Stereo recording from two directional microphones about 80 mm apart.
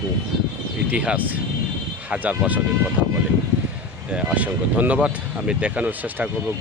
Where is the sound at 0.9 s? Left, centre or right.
Centre.